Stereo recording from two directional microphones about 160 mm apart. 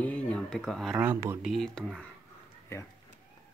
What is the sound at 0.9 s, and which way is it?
Speech, 15° right (ahead or behind).